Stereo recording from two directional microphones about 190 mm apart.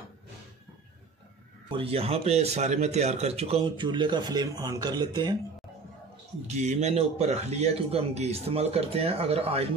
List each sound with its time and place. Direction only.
1.7 s speech: 30° right (ahead or behind)
6.4 s a man's voice: 35° right (ahead or behind)